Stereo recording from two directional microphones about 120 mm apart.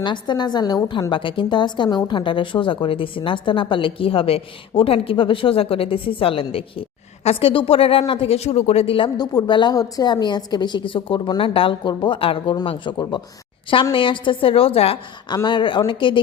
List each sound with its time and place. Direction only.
0.0 s a woman's voice: 40° left (ahead or behind)
9.1 s a woman's voice: 35° left (ahead or behind); by 14.9 s 55° left (ahead or behind)
15.4 s a woman's voice: 40° left (ahead or behind)